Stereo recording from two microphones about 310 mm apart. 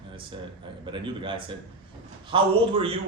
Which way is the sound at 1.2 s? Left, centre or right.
Centre.